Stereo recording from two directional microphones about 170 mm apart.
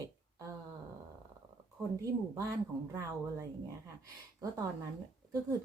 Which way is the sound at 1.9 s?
20° right (ahead or behind).